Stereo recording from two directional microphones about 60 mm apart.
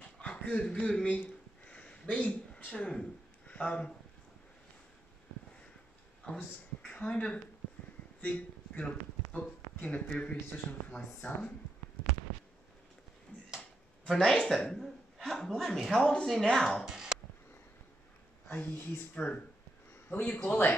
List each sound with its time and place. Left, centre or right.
0.2 s speech: centre
1.1 s a sound: left
2.0 s speech: centre
6.3 s speech: left
14.0 s a man's voice: centre
16.8 s a sound: centre
18.5 s speech: left
19.9 s a sound: left
20.4 s speech: left